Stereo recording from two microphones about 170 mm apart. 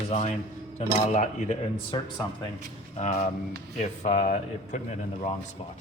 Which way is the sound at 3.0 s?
40° left (ahead or behind).